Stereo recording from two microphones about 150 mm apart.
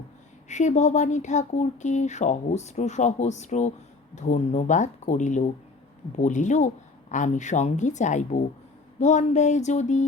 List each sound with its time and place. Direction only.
0.4 s speech: 50° left (ahead or behind)